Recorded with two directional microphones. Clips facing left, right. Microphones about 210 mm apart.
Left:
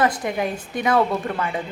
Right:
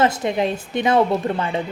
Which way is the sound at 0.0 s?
25° right (ahead or behind).